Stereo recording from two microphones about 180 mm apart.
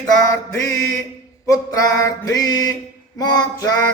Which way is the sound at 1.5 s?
20° left (ahead or behind).